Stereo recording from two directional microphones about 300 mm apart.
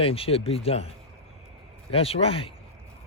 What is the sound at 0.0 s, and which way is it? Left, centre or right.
Speech, centre.